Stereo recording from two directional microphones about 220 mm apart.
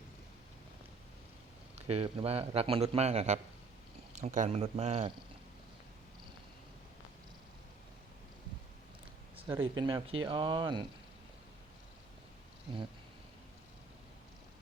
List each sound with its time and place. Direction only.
1.7 s speech: 30° right (ahead or behind)
9.5 s speech: 15° right (ahead or behind)